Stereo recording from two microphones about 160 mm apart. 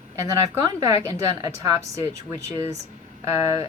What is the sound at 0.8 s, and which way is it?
Speech, 20° right (ahead or behind).